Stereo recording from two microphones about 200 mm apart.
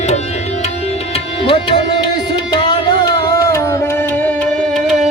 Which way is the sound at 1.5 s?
25° left (ahead or behind).